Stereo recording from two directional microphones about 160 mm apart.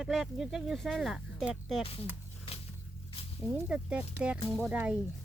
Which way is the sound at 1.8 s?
35° left (ahead or behind).